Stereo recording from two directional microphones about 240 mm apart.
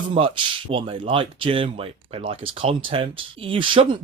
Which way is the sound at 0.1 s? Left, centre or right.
Right.